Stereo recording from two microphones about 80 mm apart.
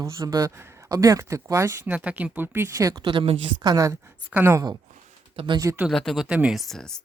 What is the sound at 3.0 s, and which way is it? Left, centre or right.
Speech, right.